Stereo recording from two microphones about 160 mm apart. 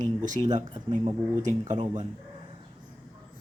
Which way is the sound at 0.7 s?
25° right (ahead or behind).